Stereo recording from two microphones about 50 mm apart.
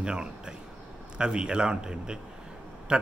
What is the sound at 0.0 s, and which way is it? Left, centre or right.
A man's voice, centre.